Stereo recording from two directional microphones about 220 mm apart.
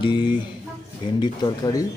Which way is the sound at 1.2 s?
20° left (ahead or behind).